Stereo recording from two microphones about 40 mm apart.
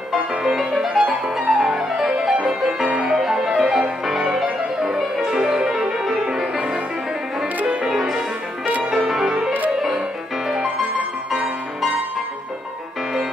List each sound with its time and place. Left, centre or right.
0.3 s music: centre
7.6 s music: centre